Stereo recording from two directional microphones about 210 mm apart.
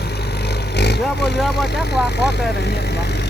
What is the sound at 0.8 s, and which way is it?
Vehicle, 55° left (ahead or behind).